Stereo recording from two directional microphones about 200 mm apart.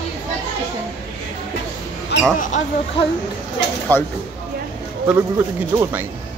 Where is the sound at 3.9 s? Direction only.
10° left (ahead or behind).